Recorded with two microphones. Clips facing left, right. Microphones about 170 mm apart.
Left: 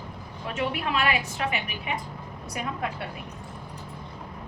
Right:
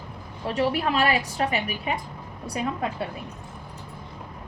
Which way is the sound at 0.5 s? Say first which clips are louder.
Right 4 dB; 35° right (ahead or behind).